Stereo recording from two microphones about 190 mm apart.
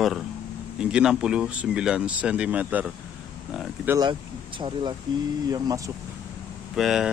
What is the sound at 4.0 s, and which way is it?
Speech, 25° right (ahead or behind).